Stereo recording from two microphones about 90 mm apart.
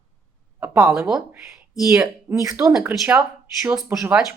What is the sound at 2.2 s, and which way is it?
Speech, 40° right (ahead or behind).